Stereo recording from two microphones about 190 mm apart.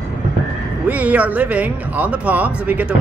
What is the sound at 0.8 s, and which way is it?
Speech, 5° right (ahead or behind).